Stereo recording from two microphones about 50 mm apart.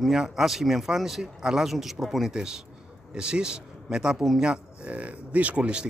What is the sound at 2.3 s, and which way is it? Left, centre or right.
A man's voice, centre.